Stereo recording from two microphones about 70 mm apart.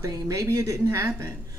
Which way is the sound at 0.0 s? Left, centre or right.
Right.